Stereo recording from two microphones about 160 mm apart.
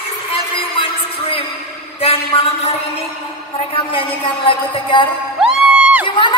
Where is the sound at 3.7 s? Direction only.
35° left (ahead or behind).